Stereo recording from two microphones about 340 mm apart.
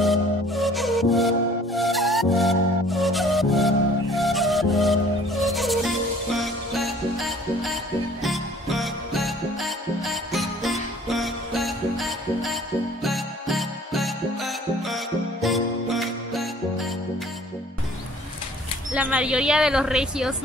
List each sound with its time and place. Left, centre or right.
0.0 s music: centre
18.9 s speech: centre